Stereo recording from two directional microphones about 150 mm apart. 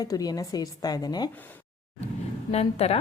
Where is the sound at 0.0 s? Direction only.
25° left (ahead or behind).